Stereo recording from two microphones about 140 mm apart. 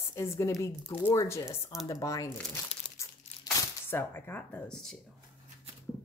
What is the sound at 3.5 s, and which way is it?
Speech, 15° left (ahead or behind).